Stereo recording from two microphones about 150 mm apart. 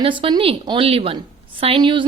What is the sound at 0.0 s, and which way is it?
A woman's voice, 35° right (ahead or behind).